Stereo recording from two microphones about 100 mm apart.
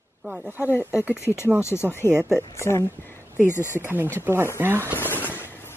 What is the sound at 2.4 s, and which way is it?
Speech, 25° left (ahead or behind).